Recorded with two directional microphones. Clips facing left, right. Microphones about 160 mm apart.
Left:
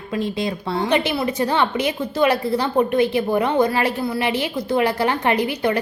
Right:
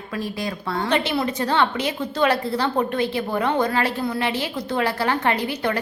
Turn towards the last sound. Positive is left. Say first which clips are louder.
# left 4 dB
turn(degrees=15)  # may be behind; listen again after turning